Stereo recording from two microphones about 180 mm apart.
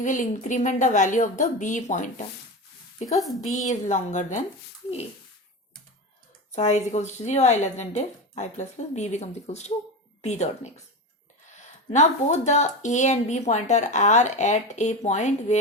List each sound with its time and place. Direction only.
0.0 s a woman's voice: 45° left (ahead or behind)
3.2 s a woman's voice: centre (ahead or behind)
3.5 s a woman's voice: 40° left (ahead or behind)
6.6 s speech: 40° left (ahead or behind)